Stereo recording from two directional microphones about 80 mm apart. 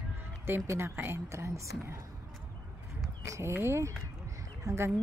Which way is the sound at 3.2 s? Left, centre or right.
Right.